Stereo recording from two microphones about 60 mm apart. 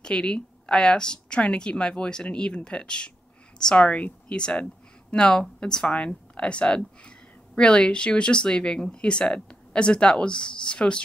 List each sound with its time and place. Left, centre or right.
0.0 s speech: centre